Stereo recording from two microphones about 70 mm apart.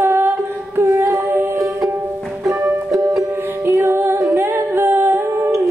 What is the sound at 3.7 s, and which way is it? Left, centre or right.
Music, right.